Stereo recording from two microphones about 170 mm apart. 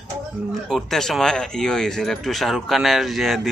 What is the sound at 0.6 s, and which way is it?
Speech, centre (ahead or behind).